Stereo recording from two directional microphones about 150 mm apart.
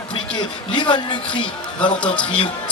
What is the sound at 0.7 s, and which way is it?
Speech, 30° left (ahead or behind).